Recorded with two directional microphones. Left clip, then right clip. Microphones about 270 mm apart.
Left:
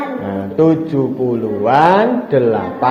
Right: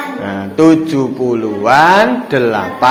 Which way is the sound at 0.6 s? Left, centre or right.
Right.